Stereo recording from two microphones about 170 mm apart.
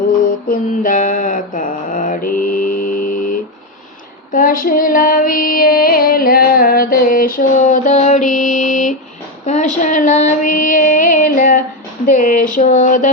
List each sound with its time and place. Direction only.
0.4 s mantra: 55° left (ahead or behind)
4.3 s female singing: 55° left (ahead or behind)